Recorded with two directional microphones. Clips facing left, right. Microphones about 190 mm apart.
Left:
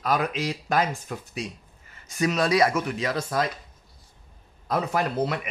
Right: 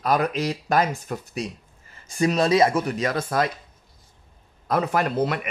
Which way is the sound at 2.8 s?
45° right (ahead or behind).